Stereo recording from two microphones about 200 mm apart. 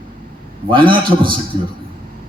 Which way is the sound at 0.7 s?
25° right (ahead or behind).